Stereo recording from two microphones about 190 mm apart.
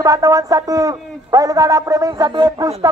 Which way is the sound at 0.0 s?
20° right (ahead or behind).